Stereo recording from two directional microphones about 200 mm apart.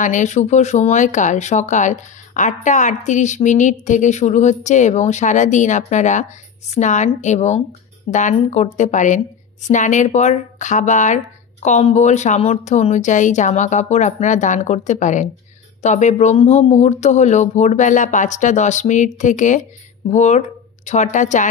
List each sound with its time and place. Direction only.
0.0 s speech: 40° left (ahead or behind)